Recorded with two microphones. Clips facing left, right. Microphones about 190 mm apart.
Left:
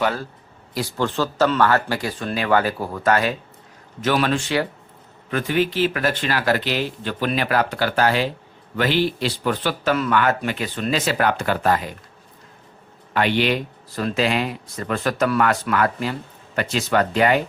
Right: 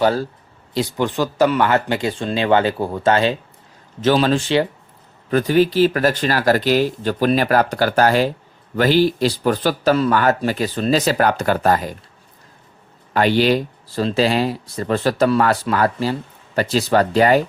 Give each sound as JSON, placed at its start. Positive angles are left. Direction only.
{"t": 0.0, "sound": "a man's voice", "side_deg": -35}
{"t": 0.7, "sound": "a man's voice", "side_deg": -20}
{"t": 13.1, "sound": "a man's voice", "side_deg": -35}